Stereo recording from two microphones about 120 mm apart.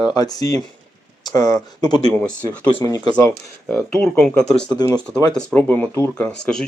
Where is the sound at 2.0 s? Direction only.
10° left (ahead or behind).